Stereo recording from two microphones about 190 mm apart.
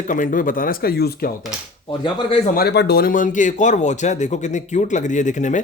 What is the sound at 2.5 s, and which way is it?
A man's voice, 60° left (ahead or behind).